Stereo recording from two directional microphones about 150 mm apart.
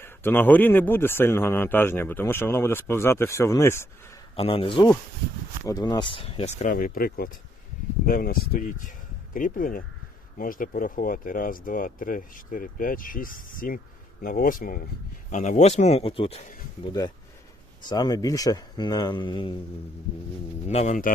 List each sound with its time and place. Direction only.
0.0 s speech: 15° left (ahead or behind)
4.4 s speech: 35° left (ahead or behind)
6.7 s speech: 65° left (ahead or behind)
15.3 s a man's voice: 55° left (ahead or behind)
17.8 s speech: 25° left (ahead or behind)
20.7 s a man's voice: 50° left (ahead or behind)